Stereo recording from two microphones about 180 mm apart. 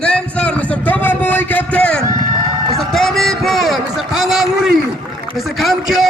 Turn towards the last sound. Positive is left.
turn(degrees=0)  # may be behind; listen again after turning